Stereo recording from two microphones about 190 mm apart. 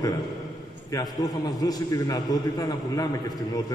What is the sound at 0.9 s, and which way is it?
A man's voice, 20° left (ahead or behind).